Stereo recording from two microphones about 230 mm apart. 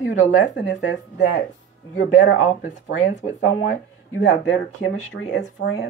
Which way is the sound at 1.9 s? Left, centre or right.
Left.